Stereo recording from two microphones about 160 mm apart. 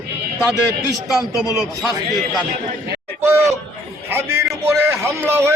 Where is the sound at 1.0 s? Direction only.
Centre (ahead or behind).